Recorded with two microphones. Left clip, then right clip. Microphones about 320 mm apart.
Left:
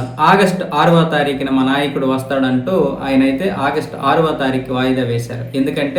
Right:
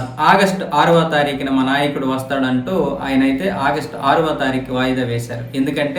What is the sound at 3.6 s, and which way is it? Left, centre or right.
A man's voice, right.